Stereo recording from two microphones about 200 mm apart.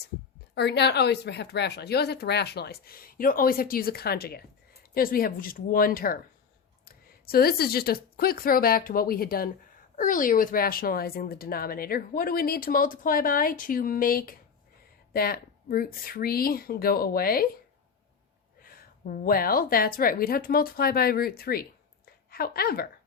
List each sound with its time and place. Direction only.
0.5 s speech: 55° left (ahead or behind)
18.6 s a woman's voice: 45° left (ahead or behind)